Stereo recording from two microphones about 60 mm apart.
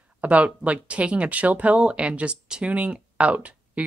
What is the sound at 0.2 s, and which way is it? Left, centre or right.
Speech, right.